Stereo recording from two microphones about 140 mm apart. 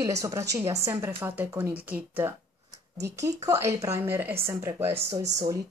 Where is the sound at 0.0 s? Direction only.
20° right (ahead or behind).